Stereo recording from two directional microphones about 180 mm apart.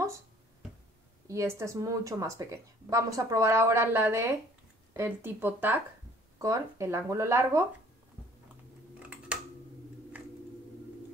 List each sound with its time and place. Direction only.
1.2 s speech: 15° right (ahead or behind)